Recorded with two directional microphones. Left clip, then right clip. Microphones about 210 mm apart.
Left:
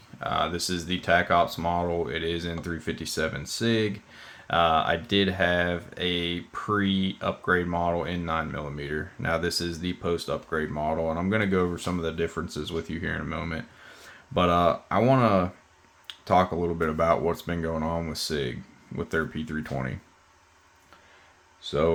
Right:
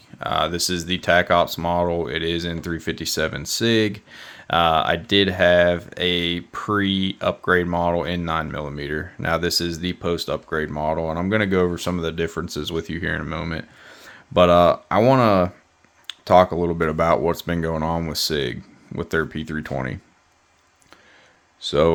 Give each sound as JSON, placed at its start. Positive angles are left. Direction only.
{"t": 0.2, "sound": "speech", "side_deg": -45}
{"t": 21.6, "sound": "speech", "side_deg": -50}